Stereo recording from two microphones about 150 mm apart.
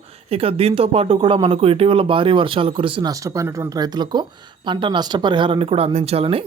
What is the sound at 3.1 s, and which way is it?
Speech, 20° right (ahead or behind).